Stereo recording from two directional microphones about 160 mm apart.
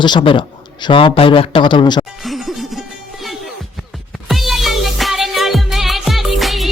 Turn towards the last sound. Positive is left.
turn(degrees=0)  # may be behind; listen again after turning